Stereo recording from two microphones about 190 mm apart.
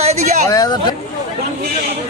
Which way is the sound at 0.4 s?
20° left (ahead or behind).